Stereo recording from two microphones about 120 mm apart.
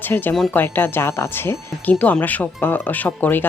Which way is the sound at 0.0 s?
15° left (ahead or behind).